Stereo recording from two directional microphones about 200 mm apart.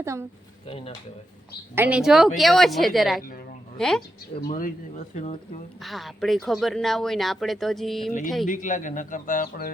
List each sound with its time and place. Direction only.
0.0 s speech: 15° right (ahead or behind)
0.7 s speech: 30° left (ahead or behind)
1.7 s speech: 10° right (ahead or behind)
4.4 s a man's voice: 45° left (ahead or behind)
5.1 s speech: 30° left (ahead or behind)
5.8 s speech: centre (ahead or behind)
8.4 s speech: 40° left (ahead or behind)